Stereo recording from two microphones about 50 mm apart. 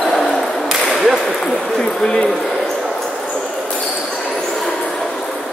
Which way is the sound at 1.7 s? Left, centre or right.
Centre.